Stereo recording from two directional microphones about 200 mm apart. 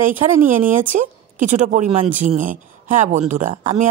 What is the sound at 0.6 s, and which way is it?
A woman's voice, 40° right (ahead or behind).